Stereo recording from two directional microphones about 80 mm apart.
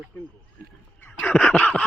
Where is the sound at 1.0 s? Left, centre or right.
Centre.